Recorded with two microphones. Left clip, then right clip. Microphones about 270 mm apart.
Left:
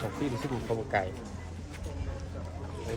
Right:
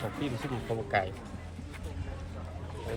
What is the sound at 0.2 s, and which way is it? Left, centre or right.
Speech, centre.